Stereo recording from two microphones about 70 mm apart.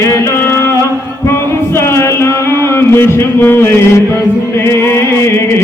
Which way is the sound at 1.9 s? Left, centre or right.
Left.